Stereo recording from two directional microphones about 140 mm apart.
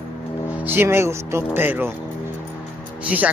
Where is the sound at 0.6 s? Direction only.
15° right (ahead or behind).